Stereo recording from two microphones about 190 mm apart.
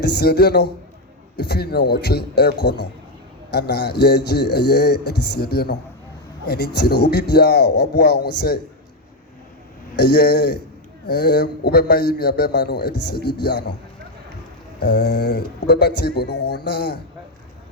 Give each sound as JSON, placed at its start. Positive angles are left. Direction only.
{"t": 0.0, "sound": "a man's voice", "side_deg": 60}
{"t": 10.0, "sound": "a man's voice", "side_deg": 60}
{"t": 14.8, "sound": "a man's voice", "side_deg": 60}